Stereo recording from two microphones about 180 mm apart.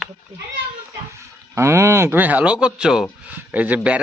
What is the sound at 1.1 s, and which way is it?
Speech, 15° right (ahead or behind).